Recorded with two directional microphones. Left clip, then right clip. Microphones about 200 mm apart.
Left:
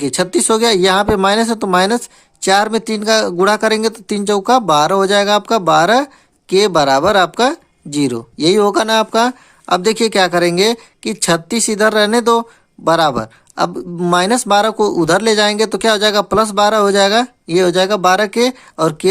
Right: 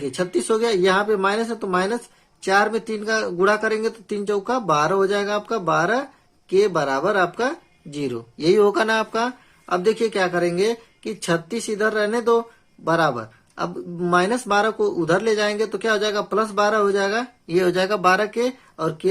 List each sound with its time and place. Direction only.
0.0 s speech: 50° left (ahead or behind)